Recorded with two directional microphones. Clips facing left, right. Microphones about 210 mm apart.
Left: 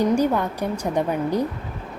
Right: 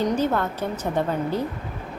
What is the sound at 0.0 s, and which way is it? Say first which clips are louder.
A woman's voice: left 3 dB; 15° left (ahead or behind).